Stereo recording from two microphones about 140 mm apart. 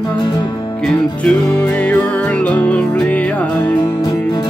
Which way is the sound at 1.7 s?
10° left (ahead or behind).